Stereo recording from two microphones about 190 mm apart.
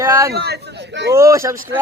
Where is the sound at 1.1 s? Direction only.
15° right (ahead or behind).